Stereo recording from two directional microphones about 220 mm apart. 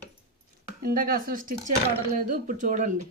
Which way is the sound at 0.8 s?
40° right (ahead or behind).